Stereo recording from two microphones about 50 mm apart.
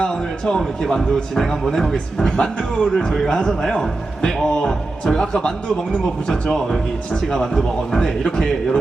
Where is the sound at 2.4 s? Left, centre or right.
Centre.